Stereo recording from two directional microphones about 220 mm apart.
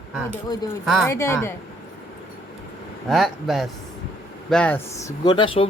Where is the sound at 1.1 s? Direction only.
10° left (ahead or behind).